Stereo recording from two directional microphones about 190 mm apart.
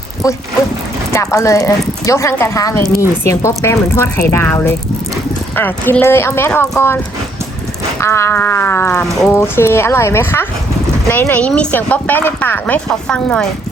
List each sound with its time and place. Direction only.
1.1 s speech: 15° left (ahead or behind)
8.0 s speech: 15° left (ahead or behind)